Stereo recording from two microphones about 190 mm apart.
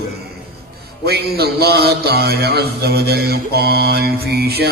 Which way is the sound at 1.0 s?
55° right (ahead or behind).